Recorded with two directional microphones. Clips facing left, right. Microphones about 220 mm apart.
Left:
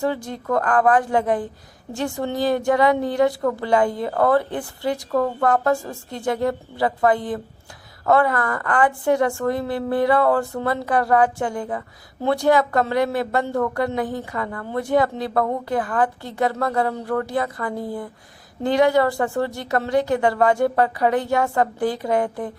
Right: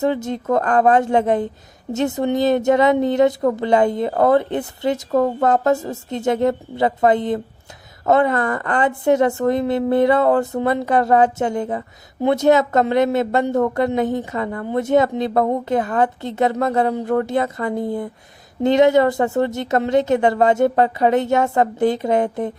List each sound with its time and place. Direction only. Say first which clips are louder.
0.0 s speech: right 4 dB; 20° right (ahead or behind)